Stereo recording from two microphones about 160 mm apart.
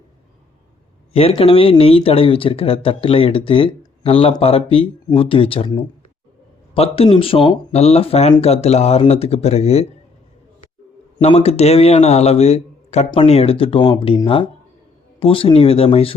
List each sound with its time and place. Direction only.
1.1 s speech: 35° left (ahead or behind)
11.2 s speech: 40° left (ahead or behind)